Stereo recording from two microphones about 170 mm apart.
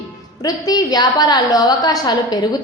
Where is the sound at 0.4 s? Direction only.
20° left (ahead or behind).